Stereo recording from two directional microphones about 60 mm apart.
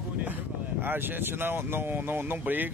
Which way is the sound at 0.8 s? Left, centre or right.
Right.